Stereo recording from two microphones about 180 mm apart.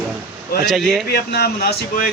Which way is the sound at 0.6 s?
Centre (ahead or behind).